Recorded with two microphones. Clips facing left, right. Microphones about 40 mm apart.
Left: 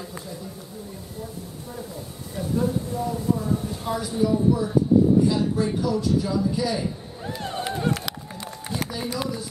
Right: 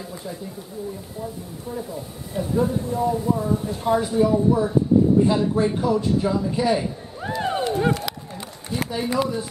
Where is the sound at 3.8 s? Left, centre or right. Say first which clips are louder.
Right 7 dB; right.